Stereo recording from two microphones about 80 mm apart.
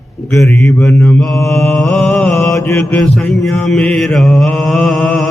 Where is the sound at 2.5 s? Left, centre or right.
Left.